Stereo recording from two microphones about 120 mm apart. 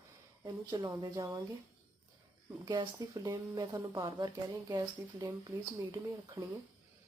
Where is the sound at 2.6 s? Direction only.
35° right (ahead or behind).